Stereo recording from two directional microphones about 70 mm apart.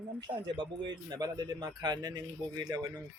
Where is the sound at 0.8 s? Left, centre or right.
Right.